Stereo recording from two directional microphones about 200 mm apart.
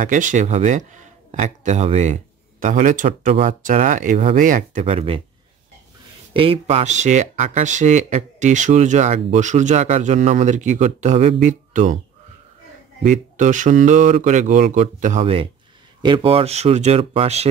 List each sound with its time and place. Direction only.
0.0 s speech: 40° right (ahead or behind)
6.3 s speech: 25° right (ahead or behind)
13.0 s speech: 40° right (ahead or behind)